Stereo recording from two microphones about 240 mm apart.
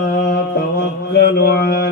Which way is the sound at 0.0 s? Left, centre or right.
Left.